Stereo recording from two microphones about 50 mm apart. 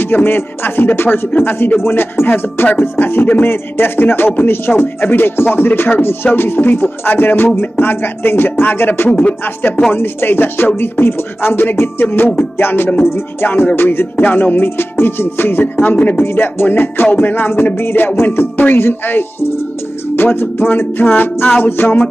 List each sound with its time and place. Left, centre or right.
0.0 s music: left
1.8 s music: left